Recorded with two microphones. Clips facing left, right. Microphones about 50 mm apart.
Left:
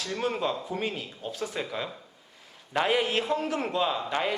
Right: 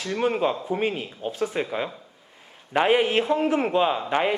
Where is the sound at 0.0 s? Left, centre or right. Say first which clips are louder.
Right 6 dB; right.